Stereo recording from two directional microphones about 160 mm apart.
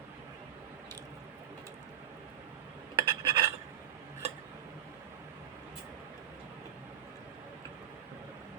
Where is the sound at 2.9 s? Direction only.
25° right (ahead or behind).